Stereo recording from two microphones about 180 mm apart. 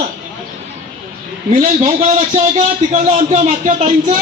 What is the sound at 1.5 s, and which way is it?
A man's voice, 40° right (ahead or behind).